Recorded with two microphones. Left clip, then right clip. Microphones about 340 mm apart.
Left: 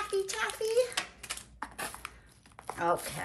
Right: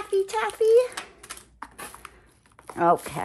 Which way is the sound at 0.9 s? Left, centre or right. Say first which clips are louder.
Left 1 dB; centre.